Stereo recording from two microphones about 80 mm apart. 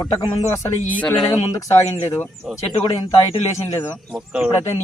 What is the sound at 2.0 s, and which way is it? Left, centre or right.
Speech, left.